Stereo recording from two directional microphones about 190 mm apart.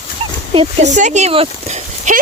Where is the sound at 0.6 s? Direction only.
40° right (ahead or behind).